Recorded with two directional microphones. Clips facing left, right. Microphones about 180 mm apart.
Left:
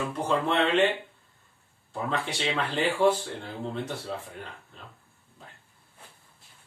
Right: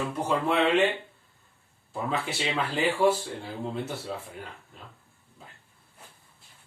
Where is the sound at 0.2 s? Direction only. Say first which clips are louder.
Even; 5° right (ahead or behind).